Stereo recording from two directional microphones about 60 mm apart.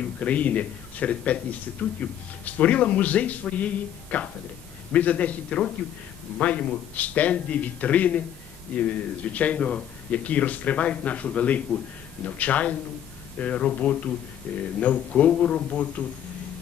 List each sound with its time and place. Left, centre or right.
0.0 s speech: left